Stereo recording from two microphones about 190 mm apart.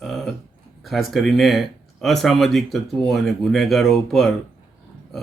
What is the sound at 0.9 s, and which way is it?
Speech, centre (ahead or behind).